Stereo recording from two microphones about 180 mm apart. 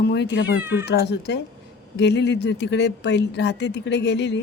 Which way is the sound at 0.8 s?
70° left (ahead or behind).